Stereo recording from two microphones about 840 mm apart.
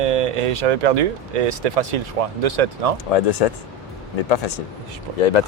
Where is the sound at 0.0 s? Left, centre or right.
Right.